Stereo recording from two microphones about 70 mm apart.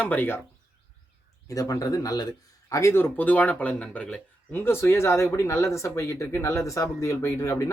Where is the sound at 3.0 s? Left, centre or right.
Left.